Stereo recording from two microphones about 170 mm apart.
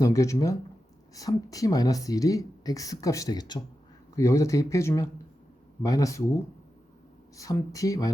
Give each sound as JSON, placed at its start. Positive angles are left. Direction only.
{"t": 0.0, "sound": "speech", "side_deg": 20}